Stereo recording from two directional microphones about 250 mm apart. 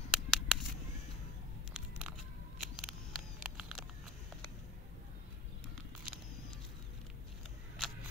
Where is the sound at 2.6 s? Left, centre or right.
Centre.